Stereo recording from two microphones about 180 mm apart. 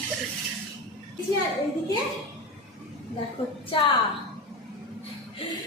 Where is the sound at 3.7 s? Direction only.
30° left (ahead or behind).